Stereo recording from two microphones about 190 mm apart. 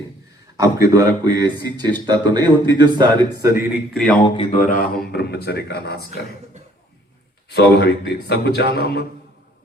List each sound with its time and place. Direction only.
0.5 s a man's voice: 15° right (ahead or behind)
3.9 s speech: 5° left (ahead or behind)
4.4 s speech: 40° left (ahead or behind); by 6.1 s 60° left (ahead or behind)
7.5 s speech: 60° left (ahead or behind)